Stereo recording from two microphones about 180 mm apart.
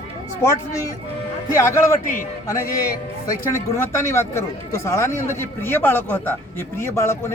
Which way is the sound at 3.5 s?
15° left (ahead or behind).